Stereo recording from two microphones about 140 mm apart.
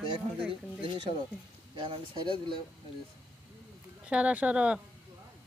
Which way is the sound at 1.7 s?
35° right (ahead or behind).